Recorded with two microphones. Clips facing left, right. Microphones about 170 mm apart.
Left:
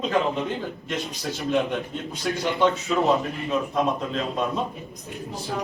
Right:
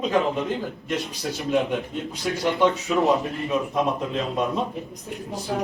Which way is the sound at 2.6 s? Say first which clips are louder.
Right 1 dB; 15° right (ahead or behind).